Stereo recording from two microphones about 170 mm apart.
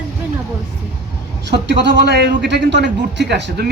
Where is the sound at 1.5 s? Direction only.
90° right.